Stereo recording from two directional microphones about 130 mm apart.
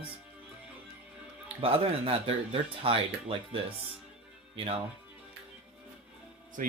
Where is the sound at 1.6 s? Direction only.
45° right (ahead or behind).